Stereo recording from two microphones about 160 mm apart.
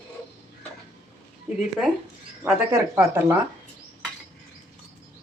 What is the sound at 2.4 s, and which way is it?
Speech, 10° right (ahead or behind).